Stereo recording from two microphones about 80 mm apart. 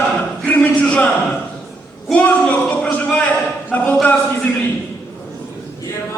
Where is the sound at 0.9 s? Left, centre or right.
Centre.